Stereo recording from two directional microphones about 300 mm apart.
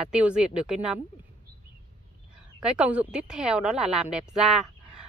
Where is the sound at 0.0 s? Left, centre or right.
Centre.